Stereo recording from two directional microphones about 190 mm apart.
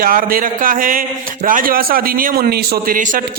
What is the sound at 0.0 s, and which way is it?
A man's voice, 50° right (ahead or behind).